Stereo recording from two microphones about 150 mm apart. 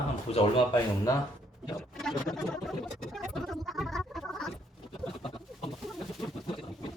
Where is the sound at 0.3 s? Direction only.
45° left (ahead or behind).